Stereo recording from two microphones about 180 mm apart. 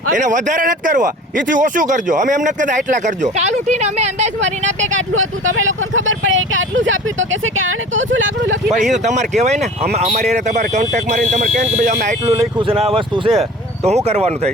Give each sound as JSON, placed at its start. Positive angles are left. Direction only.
{"t": 0.1, "sound": "speech", "side_deg": -45}
{"t": 4.9, "sound": "speech", "side_deg": -90}
{"t": 8.7, "sound": "speech", "side_deg": -40}
{"t": 12.3, "sound": "speech", "side_deg": -30}